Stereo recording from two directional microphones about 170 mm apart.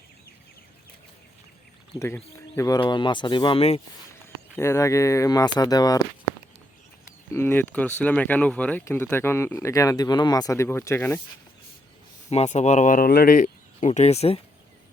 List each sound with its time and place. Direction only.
2.0 s speech: 15° left (ahead or behind); by 3.8 s 35° left (ahead or behind)
4.5 s speech: 15° left (ahead or behind)
7.3 s speech: 10° left (ahead or behind)
12.3 s speech: 40° left (ahead or behind)